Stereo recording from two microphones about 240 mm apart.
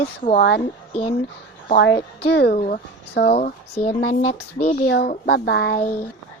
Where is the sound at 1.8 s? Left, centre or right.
Left.